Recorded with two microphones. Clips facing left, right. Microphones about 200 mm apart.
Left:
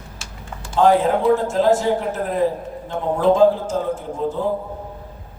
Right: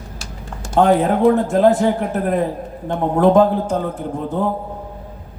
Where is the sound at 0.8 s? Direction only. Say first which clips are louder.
Right 2 dB; 60° right (ahead or behind).